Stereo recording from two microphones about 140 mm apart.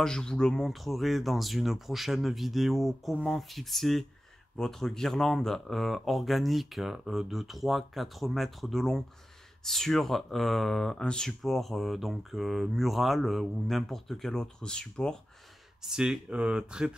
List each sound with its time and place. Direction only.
0.0 s speech: 5° left (ahead or behind)